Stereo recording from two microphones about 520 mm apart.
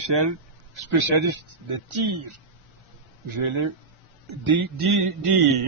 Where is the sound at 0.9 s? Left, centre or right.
Right.